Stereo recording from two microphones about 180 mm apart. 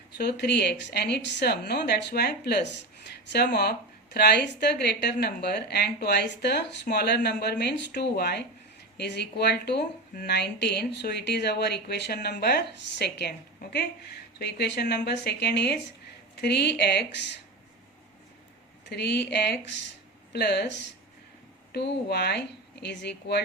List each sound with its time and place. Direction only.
0.2 s speech: 70° left (ahead or behind)
18.9 s speech: 70° left (ahead or behind)